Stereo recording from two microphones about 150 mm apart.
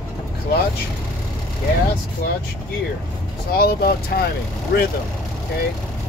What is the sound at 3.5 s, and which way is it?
Speech, 90° left.